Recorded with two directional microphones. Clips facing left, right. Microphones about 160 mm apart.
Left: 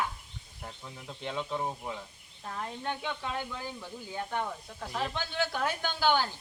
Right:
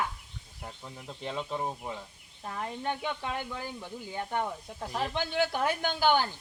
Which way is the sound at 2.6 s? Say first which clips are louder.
Right 3 dB; 15° right (ahead or behind).